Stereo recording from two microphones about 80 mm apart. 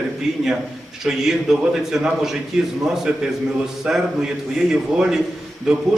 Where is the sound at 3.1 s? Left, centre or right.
Centre.